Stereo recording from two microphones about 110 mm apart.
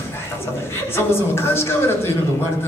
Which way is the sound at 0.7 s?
25° left (ahead or behind).